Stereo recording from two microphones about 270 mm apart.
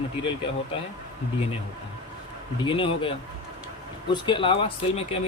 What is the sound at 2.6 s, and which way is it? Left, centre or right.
Speech, centre.